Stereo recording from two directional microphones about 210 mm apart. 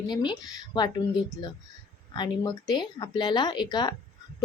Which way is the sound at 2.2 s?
20° left (ahead or behind).